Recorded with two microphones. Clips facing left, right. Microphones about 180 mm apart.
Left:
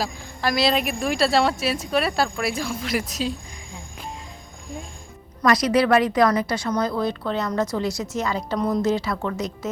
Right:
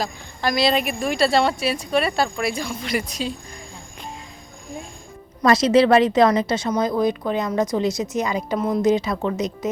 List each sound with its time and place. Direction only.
0.0 s speech: centre (ahead or behind)
5.4 s a woman's voice: 25° right (ahead or behind)
8.5 s speech: 5° right (ahead or behind)
8.8 s a woman's voice: 15° right (ahead or behind)